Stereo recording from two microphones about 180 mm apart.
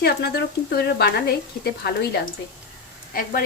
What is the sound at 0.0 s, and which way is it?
Speech, 65° left (ahead or behind).